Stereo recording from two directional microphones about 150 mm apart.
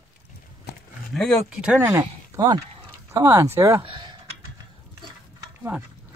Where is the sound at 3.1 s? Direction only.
15° right (ahead or behind).